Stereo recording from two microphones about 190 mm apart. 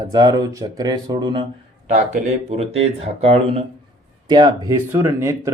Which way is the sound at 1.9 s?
40° right (ahead or behind).